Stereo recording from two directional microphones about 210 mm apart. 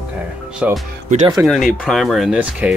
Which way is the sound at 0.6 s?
5° right (ahead or behind).